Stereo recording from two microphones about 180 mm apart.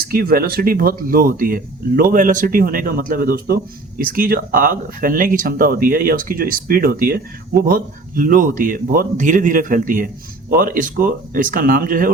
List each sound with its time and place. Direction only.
0.0 s speech: 55° right (ahead or behind)